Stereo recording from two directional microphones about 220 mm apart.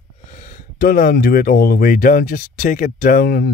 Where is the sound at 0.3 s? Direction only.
35° left (ahead or behind).